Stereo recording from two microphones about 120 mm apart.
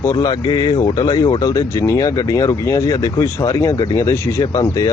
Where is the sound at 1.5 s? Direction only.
30° left (ahead or behind).